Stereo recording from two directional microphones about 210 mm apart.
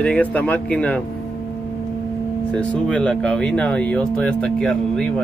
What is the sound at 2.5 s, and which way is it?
Speech, 5° left (ahead or behind).